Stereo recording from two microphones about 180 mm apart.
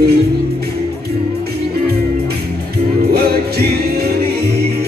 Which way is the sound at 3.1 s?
60° right (ahead or behind).